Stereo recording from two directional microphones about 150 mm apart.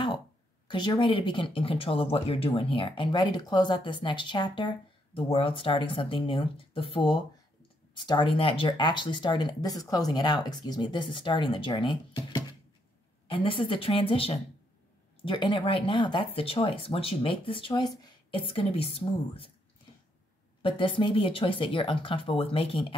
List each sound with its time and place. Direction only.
0.7 s speech: 30° left (ahead or behind)
20.6 s speech: 35° left (ahead or behind)